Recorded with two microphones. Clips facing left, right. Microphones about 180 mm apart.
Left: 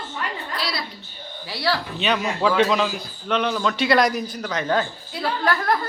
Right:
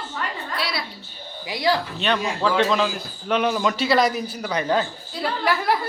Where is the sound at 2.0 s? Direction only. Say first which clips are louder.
Left 1 dB; 5° left (ahead or behind).